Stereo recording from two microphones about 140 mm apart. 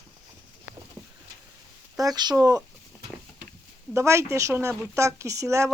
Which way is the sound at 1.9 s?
30° right (ahead or behind).